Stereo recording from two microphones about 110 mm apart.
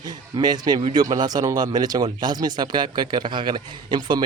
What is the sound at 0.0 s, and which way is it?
A man's voice, 40° right (ahead or behind).